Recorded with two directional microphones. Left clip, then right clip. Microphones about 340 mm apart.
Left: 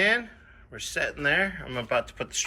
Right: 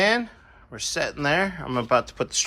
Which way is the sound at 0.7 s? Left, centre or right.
Centre.